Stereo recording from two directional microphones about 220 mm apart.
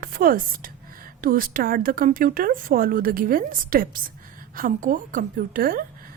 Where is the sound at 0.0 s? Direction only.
40° right (ahead or behind).